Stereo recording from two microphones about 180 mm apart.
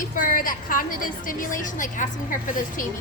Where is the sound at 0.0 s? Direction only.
50° left (ahead or behind).